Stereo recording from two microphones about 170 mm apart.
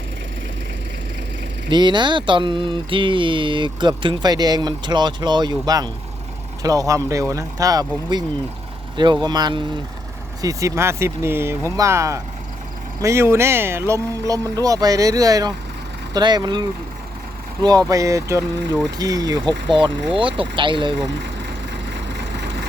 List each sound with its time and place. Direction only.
1.7 s speech: 25° right (ahead or behind)
9.2 s speech: 25° right (ahead or behind)